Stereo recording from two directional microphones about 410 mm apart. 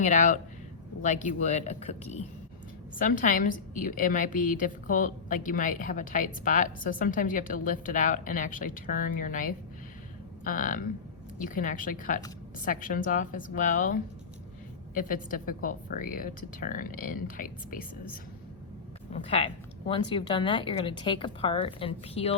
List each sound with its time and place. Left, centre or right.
0.0 s a woman's voice: centre
19.2 s speech: centre